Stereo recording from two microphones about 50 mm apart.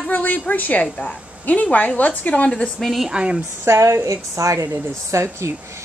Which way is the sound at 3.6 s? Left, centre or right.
Right.